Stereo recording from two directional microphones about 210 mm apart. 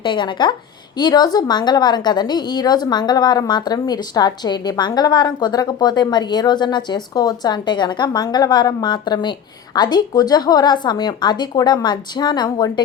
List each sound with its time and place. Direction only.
0.0 s a woman's voice: 20° left (ahead or behind)